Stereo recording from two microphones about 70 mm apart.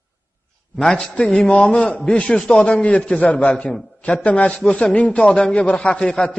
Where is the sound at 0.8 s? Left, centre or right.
Centre.